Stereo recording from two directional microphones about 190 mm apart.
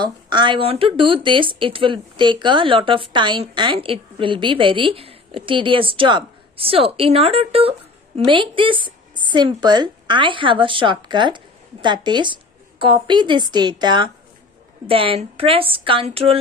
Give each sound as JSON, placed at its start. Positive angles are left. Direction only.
{"t": 0.0, "sound": "speech", "side_deg": -25}